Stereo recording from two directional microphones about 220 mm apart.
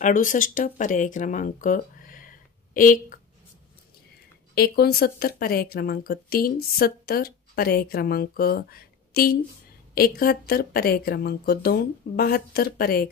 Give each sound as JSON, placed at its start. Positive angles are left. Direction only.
{"t": 0.0, "sound": "speech", "side_deg": 35}
{"t": 4.6, "sound": "speech", "side_deg": 45}